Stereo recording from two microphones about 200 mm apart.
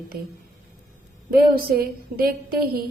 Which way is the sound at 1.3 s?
45° right (ahead or behind).